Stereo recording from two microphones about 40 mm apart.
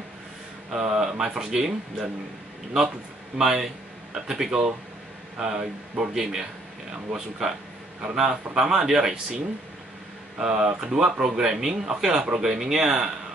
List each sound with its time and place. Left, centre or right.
0.7 s a man's voice: centre
3.3 s a man's voice: centre
10.3 s a man's voice: centre